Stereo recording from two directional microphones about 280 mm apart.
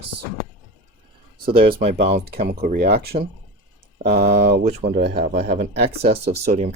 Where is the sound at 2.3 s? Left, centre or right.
Right.